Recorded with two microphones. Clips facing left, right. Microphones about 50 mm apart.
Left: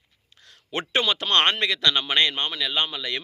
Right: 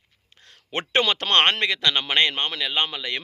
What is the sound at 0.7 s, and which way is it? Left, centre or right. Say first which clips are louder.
Speech: right 2 dB; right.